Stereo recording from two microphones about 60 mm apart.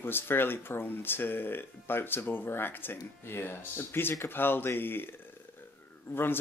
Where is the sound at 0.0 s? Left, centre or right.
Left.